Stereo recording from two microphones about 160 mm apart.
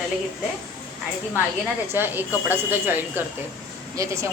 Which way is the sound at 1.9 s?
10° right (ahead or behind).